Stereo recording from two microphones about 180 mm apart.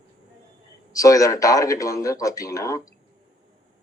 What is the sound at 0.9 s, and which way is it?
Speech, 20° left (ahead or behind).